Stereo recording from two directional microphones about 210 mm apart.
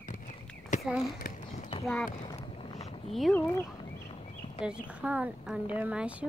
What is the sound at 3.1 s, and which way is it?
Speech, centre (ahead or behind).